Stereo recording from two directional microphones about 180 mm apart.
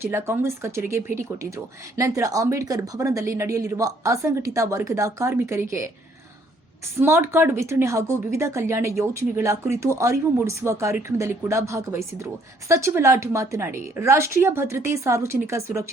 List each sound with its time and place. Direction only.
0.0 s speech: 15° right (ahead or behind)
7.0 s speech: 15° right (ahead or behind)